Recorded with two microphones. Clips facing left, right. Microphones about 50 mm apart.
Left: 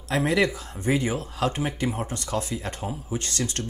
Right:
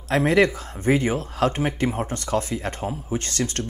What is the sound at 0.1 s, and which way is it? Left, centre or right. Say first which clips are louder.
Speech: right 4 dB; right.